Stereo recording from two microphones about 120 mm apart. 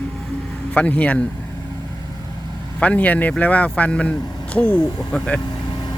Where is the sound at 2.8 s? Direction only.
10° left (ahead or behind).